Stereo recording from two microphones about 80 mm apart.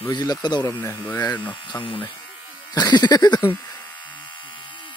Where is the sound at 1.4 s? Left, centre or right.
Left.